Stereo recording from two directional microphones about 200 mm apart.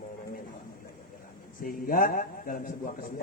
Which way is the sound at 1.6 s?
45° left (ahead or behind).